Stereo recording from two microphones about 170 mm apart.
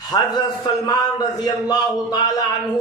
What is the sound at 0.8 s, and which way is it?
Speech, 20° left (ahead or behind).